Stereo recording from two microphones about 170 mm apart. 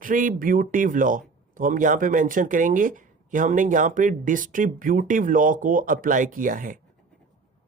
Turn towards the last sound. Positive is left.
turn(degrees=-50)  # may be behind; listen again after turning